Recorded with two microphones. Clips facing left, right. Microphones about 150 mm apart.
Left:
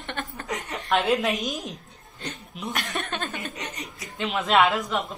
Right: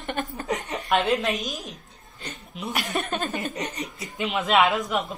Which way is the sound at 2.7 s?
15° right (ahead or behind).